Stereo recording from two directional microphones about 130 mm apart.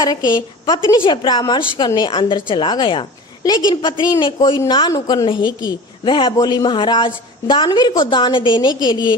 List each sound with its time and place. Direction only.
0.0 s a woman's voice: 30° left (ahead or behind)